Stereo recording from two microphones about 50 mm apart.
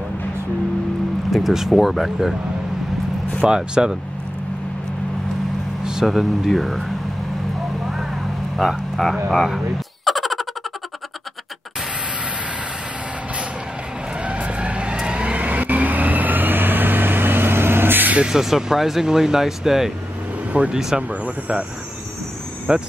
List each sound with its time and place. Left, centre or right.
1.3 s speech: centre
3.4 s speech: centre
5.9 s speech: centre
8.5 s speech: centre
10.0 s a sound: centre
14.1 s vehicle: right
18.2 s speech: centre
21.1 s speech: right
22.7 s speech: centre